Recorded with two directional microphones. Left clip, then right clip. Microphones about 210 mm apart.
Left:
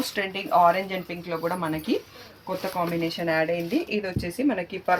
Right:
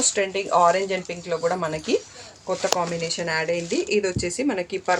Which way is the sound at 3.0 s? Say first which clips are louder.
Even; 45° right (ahead or behind).